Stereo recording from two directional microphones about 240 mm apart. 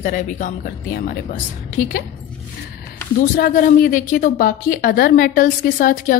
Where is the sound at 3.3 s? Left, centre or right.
Left.